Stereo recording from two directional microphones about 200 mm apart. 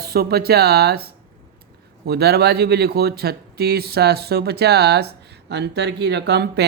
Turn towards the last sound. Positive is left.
turn(degrees=-55)  # may be behind; listen again after turning